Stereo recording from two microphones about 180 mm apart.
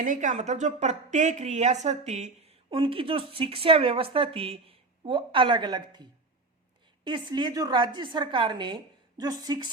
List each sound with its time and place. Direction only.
0.0 s a woman's voice: 45° right (ahead or behind); by 9.6 s 20° right (ahead or behind)